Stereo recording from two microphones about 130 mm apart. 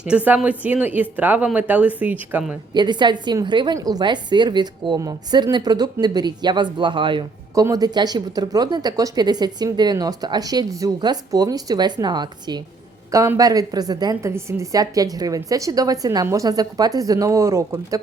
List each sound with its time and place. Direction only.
0.3 s speech: 10° right (ahead or behind)
2.7 s speech: 35° right (ahead or behind)
7.5 s a woman's voice: 25° right (ahead or behind)